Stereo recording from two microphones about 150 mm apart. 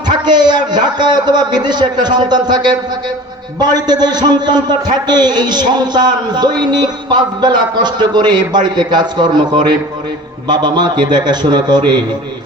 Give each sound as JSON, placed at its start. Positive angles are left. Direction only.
{"t": 0.3, "sound": "a man's voice", "side_deg": -30}